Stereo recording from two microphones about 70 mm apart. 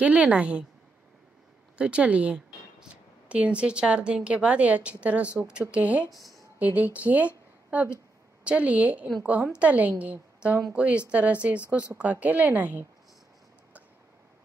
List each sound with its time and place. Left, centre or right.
0.0 s a woman's voice: centre
1.8 s a woman's voice: centre